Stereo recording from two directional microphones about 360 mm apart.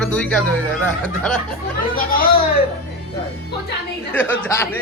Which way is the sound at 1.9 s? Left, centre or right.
Left.